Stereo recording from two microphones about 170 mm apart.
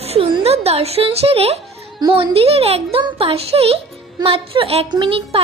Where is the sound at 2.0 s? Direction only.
25° right (ahead or behind).